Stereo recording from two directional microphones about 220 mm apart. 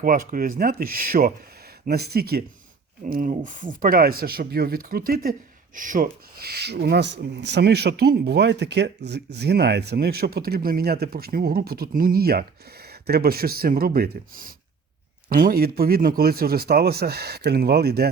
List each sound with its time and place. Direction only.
0.0 s speech: 40° right (ahead or behind)